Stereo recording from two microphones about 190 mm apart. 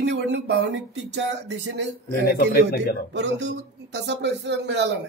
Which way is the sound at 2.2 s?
55° left (ahead or behind).